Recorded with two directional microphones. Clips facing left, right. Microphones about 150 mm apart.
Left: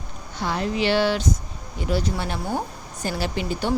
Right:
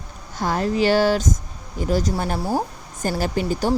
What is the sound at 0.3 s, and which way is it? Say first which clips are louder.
Speech: right 4 dB; 45° right (ahead or behind).